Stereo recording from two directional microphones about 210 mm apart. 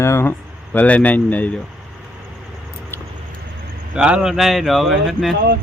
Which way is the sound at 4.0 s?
5° right (ahead or behind).